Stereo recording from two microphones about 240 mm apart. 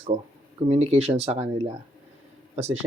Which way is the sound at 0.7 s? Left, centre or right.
Right.